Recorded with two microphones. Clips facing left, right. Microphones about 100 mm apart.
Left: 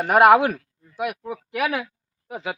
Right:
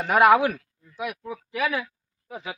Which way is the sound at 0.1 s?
55° left (ahead or behind).